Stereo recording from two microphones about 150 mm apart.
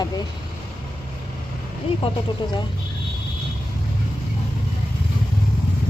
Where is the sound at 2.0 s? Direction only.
30° left (ahead or behind).